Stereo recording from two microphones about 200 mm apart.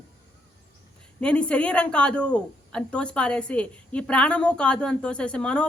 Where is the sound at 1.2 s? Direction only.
5° left (ahead or behind).